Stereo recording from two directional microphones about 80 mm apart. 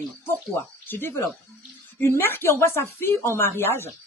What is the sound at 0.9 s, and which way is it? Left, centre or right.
A woman's voice, left.